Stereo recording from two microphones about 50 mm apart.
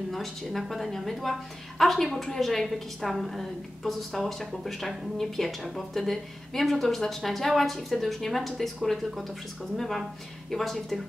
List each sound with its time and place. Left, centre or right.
0.1 s a woman's voice: centre